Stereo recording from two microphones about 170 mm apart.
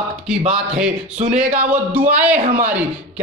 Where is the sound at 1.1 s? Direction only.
40° right (ahead or behind).